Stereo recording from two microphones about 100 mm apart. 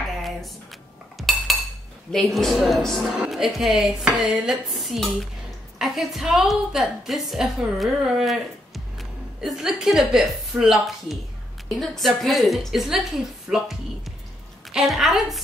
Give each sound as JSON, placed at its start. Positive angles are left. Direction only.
{"t": 0.2, "sound": "cutlery", "side_deg": 0}
{"t": 2.1, "sound": "a woman's voice", "side_deg": 5}
{"t": 13.5, "sound": "music", "side_deg": 0}
{"t": 14.7, "sound": "a woman's voice", "side_deg": -5}